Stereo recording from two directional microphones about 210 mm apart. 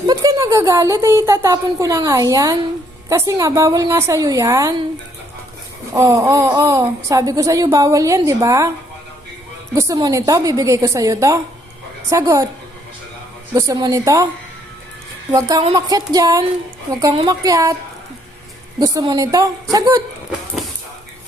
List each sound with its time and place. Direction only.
0.1 s speech: 15° right (ahead or behind)
5.9 s speech: 15° right (ahead or behind)
9.7 s speech: 15° right (ahead or behind)
13.5 s speech: 15° right (ahead or behind)
15.3 s speech: 15° right (ahead or behind)
18.8 s speech: 15° right (ahead or behind)